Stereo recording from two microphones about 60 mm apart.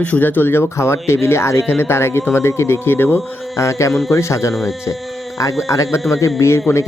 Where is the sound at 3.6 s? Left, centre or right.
Left.